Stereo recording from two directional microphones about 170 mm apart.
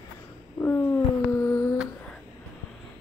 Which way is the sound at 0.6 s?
15° left (ahead or behind).